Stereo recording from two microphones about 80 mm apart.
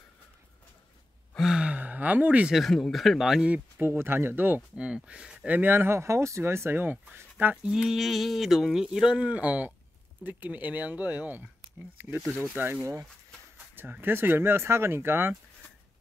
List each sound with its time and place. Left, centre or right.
1.4 s sigh: centre
2.5 s speech: centre
3.4 s speech: centre
3.8 s speech: right
4.6 s speech: centre
5.5 s speech: right
7.6 s speech: centre; by 11.4 s right
12.5 s speech: right
14.0 s speech: right